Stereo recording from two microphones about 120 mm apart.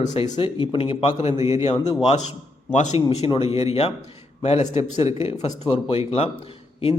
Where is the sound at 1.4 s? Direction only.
25° right (ahead or behind).